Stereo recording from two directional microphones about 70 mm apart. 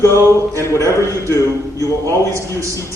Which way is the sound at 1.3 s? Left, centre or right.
Left.